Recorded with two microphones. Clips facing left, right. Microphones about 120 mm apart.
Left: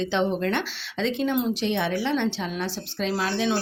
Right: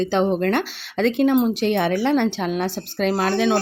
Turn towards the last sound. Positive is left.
turn(degrees=-60)  # may be behind; listen again after turning